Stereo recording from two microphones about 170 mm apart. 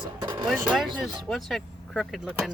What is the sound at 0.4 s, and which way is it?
Speech, centre (ahead or behind).